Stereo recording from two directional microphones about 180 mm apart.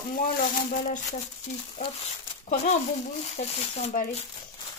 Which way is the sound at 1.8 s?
45° left (ahead or behind).